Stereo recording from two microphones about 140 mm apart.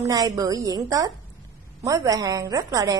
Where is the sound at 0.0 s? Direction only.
25° right (ahead or behind).